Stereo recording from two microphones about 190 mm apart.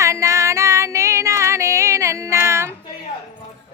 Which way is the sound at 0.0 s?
15° right (ahead or behind).